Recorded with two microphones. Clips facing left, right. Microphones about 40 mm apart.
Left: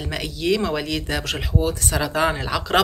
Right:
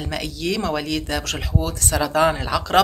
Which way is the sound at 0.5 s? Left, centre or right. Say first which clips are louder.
Left 2 dB; centre.